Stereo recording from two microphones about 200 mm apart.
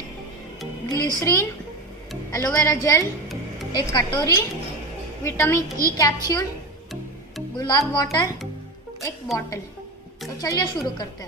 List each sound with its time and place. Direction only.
0.8 s a woman's voice: 15° left (ahead or behind)
7.5 s a woman's voice: 20° left (ahead or behind)
10.4 s speech: 15° left (ahead or behind)